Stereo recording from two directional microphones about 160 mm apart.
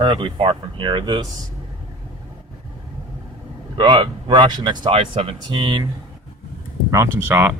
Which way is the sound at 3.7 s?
30° right (ahead or behind).